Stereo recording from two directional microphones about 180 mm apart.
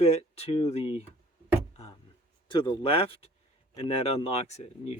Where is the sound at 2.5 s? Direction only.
25° left (ahead or behind).